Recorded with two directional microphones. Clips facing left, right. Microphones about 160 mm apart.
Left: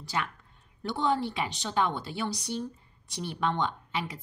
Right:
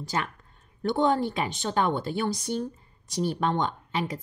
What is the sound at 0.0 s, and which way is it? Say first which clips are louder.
A woman's voice: right 3 dB; 45° right (ahead or behind).